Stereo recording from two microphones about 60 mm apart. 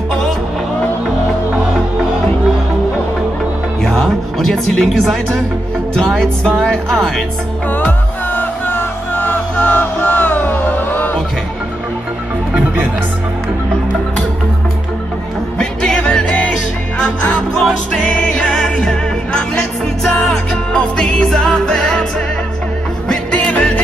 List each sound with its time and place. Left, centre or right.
3.8 s speech: centre
6.4 s speech: centre
7.7 s music: left
15.6 s music: centre
17.6 s music: centre
23.0 s music: centre